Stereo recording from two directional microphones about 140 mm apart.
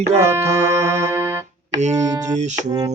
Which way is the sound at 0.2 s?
20° right (ahead or behind).